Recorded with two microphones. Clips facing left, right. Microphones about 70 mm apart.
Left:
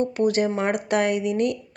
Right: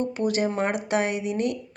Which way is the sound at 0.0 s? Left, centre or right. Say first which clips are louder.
Left 4 dB; left.